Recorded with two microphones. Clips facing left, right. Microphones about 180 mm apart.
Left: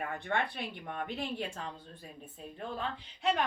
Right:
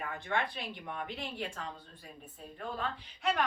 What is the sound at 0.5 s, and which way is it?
Speech, 50° left (ahead or behind).